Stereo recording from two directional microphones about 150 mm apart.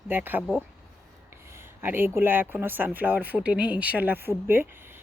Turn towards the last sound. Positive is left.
turn(degrees=-15)  # may be behind; listen again after turning